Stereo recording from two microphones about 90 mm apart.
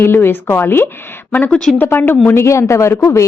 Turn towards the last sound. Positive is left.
turn(degrees=35)  # may be behind; listen again after turning